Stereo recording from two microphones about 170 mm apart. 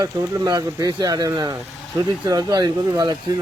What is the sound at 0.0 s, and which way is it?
A man's voice, 20° right (ahead or behind).